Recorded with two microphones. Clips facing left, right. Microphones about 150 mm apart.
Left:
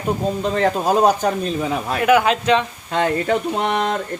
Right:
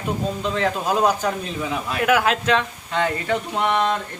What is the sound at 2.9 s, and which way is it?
Speech, 45° left (ahead or behind).